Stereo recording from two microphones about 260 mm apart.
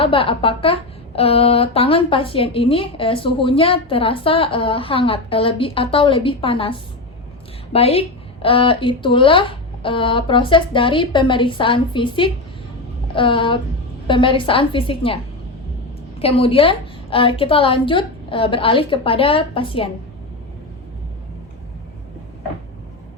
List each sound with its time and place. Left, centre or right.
0.0 s speech: left
16.2 s speech: left